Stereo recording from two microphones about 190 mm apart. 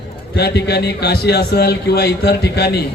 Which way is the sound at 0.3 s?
55° left (ahead or behind).